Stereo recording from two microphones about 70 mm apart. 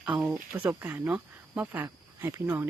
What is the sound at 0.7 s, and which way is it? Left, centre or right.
Speech, right.